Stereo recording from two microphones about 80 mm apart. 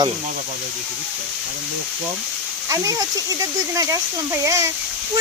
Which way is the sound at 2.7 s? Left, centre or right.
Right.